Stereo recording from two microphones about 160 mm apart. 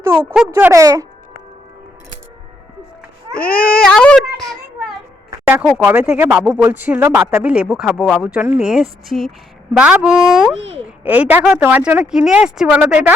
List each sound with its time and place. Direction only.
0.5 s speech: 15° right (ahead or behind)
3.3 s speech: 5° left (ahead or behind)
5.8 s speech: 10° right (ahead or behind)